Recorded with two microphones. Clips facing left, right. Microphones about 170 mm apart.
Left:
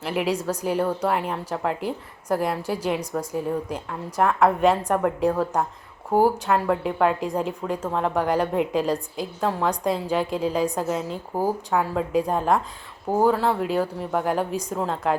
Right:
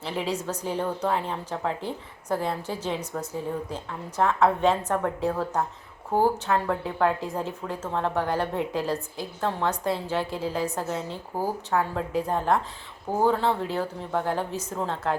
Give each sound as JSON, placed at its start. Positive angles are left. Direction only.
{"t": 0.0, "sound": "a woman's voice", "side_deg": 10}